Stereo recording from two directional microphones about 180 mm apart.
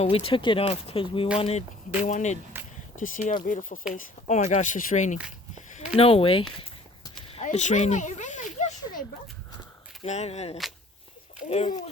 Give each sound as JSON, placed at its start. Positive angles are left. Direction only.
{"t": 0.0, "sound": "speech", "side_deg": 30}
{"t": 6.0, "sound": "speech", "side_deg": 30}
{"t": 6.6, "sound": "walk", "side_deg": 30}
{"t": 7.4, "sound": "a sound", "side_deg": 45}
{"t": 10.0, "sound": "speech", "side_deg": 35}